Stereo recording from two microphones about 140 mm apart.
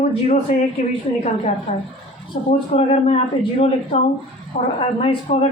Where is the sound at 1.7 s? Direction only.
50° left (ahead or behind).